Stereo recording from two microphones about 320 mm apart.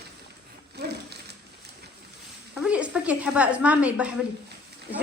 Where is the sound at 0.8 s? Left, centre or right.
Right.